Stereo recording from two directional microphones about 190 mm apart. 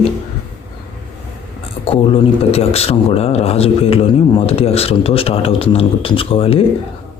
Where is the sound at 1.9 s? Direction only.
30° left (ahead or behind).